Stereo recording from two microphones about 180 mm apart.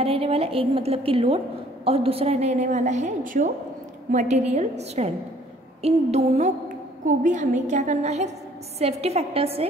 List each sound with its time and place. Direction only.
0.0 s a woman's voice: 35° right (ahead or behind)